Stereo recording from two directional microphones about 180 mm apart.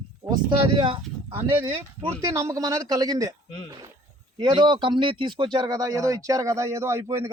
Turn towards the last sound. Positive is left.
turn(degrees=-15)  # may be behind; listen again after turning